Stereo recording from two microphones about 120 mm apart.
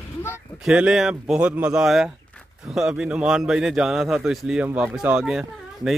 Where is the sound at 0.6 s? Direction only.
5° right (ahead or behind).